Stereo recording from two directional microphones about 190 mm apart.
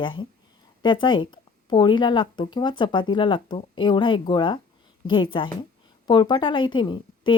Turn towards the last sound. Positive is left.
turn(degrees=25)  # may be behind; listen again after turning